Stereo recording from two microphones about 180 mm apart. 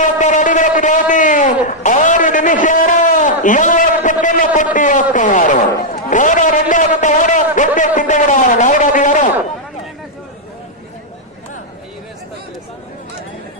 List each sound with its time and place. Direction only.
0.2 s a man's voice: 45° left (ahead or behind)